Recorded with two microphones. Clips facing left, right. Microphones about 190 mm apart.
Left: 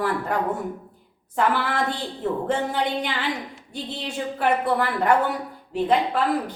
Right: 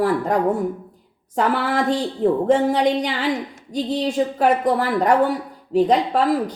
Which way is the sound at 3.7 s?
40° right (ahead or behind).